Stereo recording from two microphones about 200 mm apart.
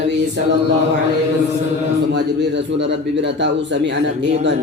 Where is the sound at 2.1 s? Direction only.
60° right (ahead or behind).